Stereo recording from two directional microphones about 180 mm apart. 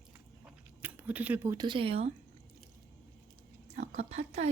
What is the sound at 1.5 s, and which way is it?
Speech, 25° right (ahead or behind).